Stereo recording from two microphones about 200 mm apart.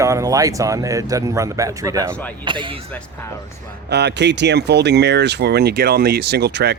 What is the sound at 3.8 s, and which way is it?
Speech, 55° right (ahead or behind).